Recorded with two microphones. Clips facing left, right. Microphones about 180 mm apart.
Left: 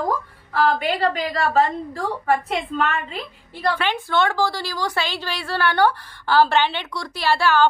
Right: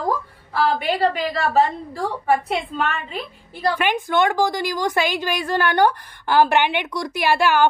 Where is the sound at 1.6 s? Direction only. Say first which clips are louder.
Right 2 dB; 10° right (ahead or behind).